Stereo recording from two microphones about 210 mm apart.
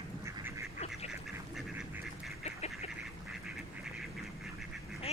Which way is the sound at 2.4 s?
30° left (ahead or behind).